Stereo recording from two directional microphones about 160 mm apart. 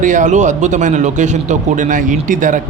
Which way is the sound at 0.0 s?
50° right (ahead or behind).